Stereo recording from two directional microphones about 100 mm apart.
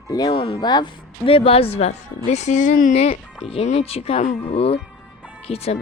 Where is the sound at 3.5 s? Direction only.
75° left (ahead or behind).